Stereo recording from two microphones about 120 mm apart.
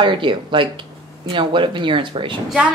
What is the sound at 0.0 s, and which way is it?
Speech, 45° right (ahead or behind).